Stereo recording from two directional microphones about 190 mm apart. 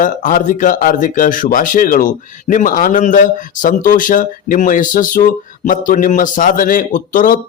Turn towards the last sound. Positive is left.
turn(degrees=45)  # may be behind; listen again after turning